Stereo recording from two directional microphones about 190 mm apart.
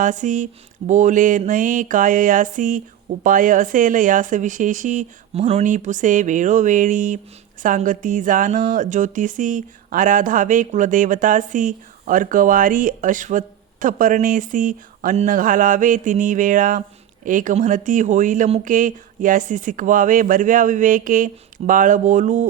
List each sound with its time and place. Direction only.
0.0 s speech: 40° right (ahead or behind)